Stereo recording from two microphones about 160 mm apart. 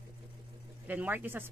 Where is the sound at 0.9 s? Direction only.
10° right (ahead or behind).